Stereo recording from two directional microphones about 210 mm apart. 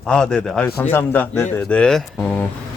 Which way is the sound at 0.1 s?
5° left (ahead or behind).